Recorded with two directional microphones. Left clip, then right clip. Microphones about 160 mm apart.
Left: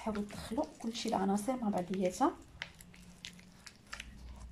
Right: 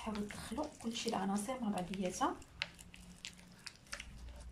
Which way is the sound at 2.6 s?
10° right (ahead or behind).